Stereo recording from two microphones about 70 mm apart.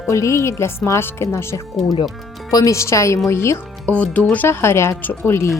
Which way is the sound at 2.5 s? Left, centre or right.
Left.